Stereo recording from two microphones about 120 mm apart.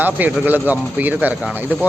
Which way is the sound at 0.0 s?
15° right (ahead or behind).